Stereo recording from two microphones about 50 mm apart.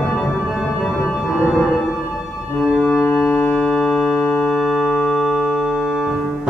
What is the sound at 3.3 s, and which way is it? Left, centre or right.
Music, left.